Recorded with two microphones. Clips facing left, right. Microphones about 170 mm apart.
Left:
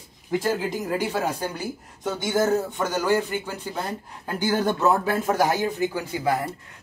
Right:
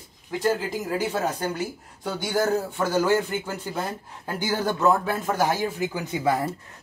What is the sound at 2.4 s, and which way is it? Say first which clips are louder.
Speech: left 1 dB; 20° left (ahead or behind).